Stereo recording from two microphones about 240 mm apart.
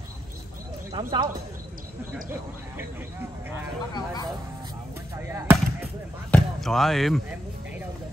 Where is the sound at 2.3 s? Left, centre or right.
Centre.